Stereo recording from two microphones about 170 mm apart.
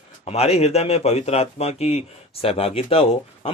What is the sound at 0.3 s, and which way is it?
A man's voice, 35° left (ahead or behind).